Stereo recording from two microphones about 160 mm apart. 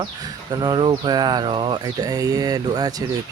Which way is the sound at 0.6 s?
25° right (ahead or behind).